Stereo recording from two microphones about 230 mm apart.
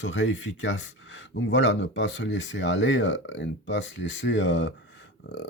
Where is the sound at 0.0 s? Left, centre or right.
Left.